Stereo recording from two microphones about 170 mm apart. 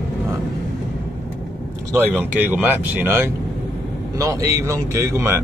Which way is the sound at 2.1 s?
10° right (ahead or behind).